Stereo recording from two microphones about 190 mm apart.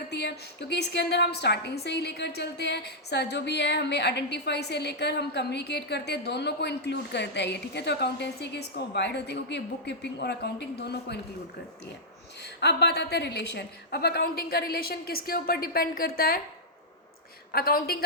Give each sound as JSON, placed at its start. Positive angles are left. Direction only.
{"t": 0.1, "sound": "a woman's voice", "side_deg": 60}
{"t": 12.5, "sound": "a woman's voice", "side_deg": 60}
{"t": 17.5, "sound": "a woman's voice", "side_deg": 55}